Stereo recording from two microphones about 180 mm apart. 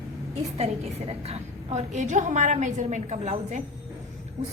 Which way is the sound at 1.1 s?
35° right (ahead or behind).